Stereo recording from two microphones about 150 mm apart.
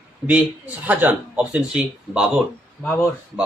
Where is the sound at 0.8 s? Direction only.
10° right (ahead or behind).